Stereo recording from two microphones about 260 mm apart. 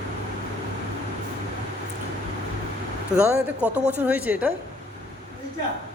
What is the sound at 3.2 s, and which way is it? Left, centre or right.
Speech, centre.